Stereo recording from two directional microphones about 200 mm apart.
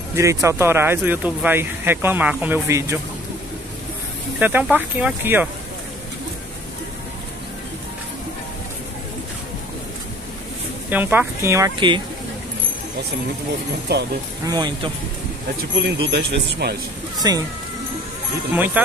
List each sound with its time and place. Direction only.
0.1 s speech: 15° right (ahead or behind)
4.4 s speech: 10° right (ahead or behind)
10.9 s speech: 10° right (ahead or behind)
13.9 s speech: 55° right (ahead or behind)
14.4 s speech: 20° right (ahead or behind)
15.7 s speech: 55° right (ahead or behind)
17.2 s speech: 20° right (ahead or behind)
18.5 s speech: 10° right (ahead or behind)